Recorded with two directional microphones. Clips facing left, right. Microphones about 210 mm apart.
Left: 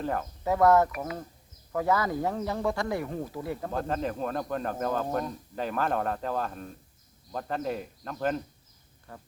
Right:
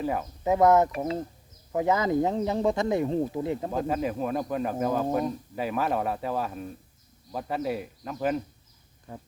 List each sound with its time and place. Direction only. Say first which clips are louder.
0.0 s speech: right 2 dB; 10° right (ahead or behind)
0.4 s speech: right 2 dB; 20° right (ahead or behind)
3.7 s speech: right 3 dB; 10° right (ahead or behind)
9.1 s speech: right 5 dB; 20° right (ahead or behind)